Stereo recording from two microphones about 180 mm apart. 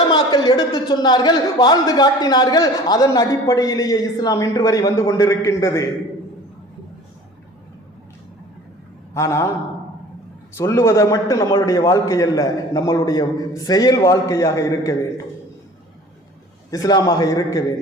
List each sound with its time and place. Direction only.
0.1 s a man's voice: 25° left (ahead or behind)
9.1 s speech: 15° left (ahead or behind)
10.6 s a man's voice: 15° left (ahead or behind)
16.7 s a man's voice: 20° left (ahead or behind)